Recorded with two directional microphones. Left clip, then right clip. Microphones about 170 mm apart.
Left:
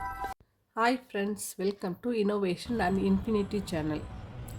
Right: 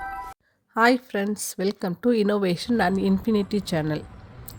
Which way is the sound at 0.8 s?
35° right (ahead or behind).